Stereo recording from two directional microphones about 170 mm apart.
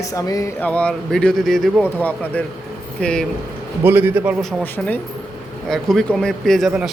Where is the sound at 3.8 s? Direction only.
10° right (ahead or behind).